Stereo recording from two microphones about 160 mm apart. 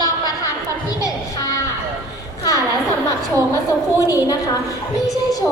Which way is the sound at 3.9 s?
20° left (ahead or behind).